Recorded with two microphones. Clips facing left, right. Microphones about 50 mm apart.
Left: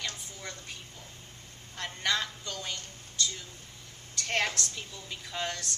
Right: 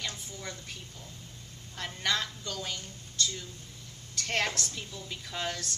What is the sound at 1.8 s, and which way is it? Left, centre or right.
A woman's voice, centre.